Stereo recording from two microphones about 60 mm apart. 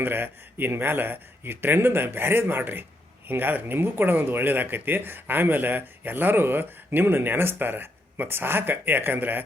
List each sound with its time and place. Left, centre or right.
0.0 s speech: right